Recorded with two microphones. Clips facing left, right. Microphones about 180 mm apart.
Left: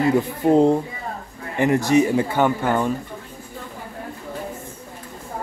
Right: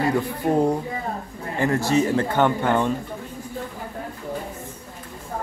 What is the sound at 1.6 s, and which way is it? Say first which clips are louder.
A man's voice: left 4 dB; 20° left (ahead or behind).